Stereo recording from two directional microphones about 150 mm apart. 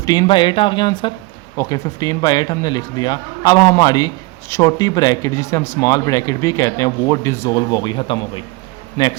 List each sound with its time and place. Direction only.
0.0 s speech: 30° left (ahead or behind)